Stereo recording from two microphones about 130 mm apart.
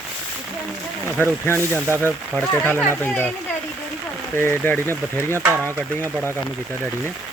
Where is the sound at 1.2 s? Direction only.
15° left (ahead or behind).